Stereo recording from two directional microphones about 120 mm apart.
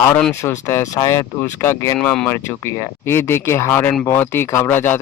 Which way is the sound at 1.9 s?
10° left (ahead or behind).